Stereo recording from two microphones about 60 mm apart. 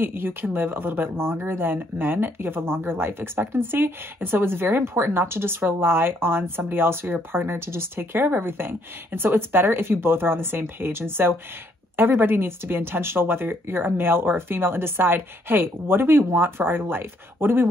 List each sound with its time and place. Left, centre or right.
0.0 s speech: right